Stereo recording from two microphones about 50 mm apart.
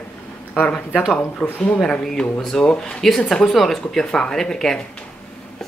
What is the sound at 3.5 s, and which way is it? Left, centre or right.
Speech, centre.